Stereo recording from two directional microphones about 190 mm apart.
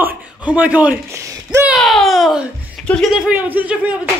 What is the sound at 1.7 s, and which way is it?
Speech, centre (ahead or behind).